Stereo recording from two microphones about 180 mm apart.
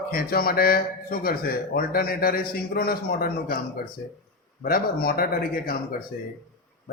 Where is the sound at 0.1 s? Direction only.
55° left (ahead or behind).